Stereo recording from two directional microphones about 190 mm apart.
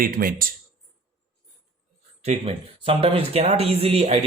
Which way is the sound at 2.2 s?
30° right (ahead or behind).